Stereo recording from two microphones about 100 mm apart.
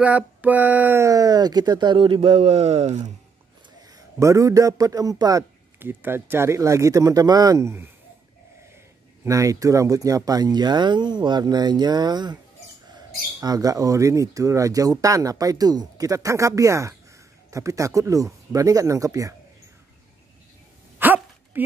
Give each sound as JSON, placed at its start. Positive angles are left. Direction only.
{"t": 0.0, "sound": "a sound", "side_deg": -15}
{"t": 1.0, "sound": "speech", "side_deg": -35}
{"t": 3.9, "sound": "a man's voice", "side_deg": -35}
{"t": 5.8, "sound": "speech", "side_deg": -20}
{"t": 9.2, "sound": "speech", "side_deg": -35}
{"t": 21.0, "sound": "a sound", "side_deg": -20}